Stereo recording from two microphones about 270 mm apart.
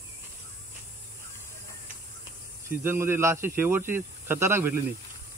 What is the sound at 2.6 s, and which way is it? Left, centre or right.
Speech, centre.